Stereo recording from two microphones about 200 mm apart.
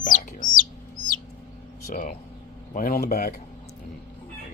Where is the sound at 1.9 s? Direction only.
40° left (ahead or behind).